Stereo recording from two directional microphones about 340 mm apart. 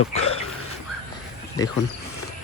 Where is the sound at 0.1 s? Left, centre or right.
Centre.